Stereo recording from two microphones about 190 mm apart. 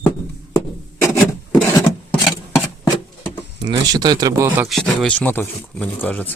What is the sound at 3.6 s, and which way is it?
Speech, 20° right (ahead or behind).